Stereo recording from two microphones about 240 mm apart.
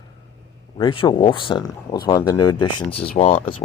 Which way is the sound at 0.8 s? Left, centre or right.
Centre.